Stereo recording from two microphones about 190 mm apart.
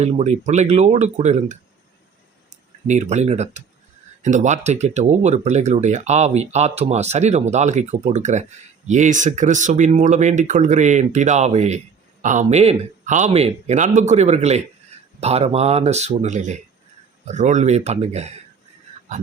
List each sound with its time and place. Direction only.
0.0 s speech: 35° right (ahead or behind)
2.8 s speech: 35° right (ahead or behind)